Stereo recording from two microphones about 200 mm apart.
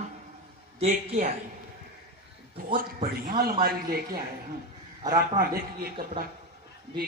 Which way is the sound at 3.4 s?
50° right (ahead or behind).